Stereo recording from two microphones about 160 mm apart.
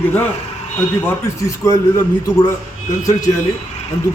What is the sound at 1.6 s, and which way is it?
Speech, 20° left (ahead or behind).